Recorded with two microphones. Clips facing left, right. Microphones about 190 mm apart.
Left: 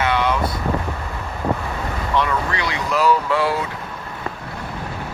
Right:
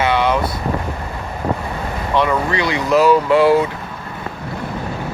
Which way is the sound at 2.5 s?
20° right (ahead or behind).